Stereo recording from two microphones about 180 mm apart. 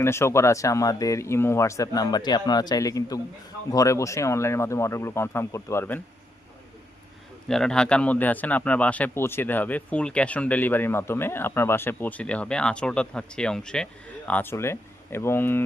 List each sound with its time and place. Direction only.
0.0 s speech: 15° left (ahead or behind)
7.4 s speech: 5° left (ahead or behind)